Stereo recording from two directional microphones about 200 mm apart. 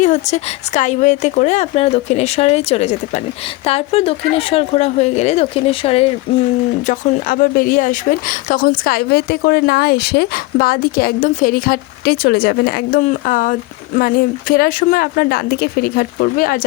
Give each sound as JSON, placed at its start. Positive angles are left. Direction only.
{"t": 0.0, "sound": "speech", "side_deg": 35}
{"t": 6.3, "sound": "a sound", "side_deg": 25}
{"t": 6.8, "sound": "speech", "side_deg": 40}